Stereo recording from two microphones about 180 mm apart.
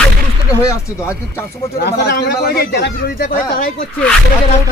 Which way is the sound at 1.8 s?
65° left (ahead or behind).